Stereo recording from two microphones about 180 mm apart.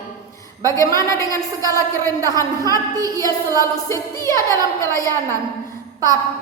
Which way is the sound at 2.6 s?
20° right (ahead or behind).